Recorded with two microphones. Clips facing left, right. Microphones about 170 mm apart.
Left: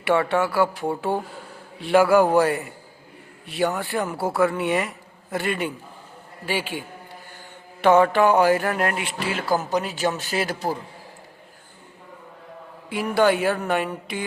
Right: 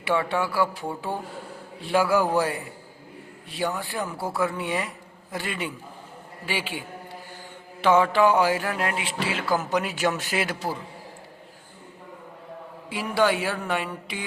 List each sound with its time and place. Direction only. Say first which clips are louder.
0.0 s speech: left 4 dB; 65° left (ahead or behind)
5.3 s mantra: left 6 dB; 55° left (ahead or behind)
9.5 s speech: left 2 dB; 35° left (ahead or behind)
12.9 s mantra: left 3 dB; 50° left (ahead or behind)